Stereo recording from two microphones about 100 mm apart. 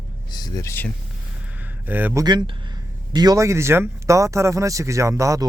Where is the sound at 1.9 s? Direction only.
20° right (ahead or behind).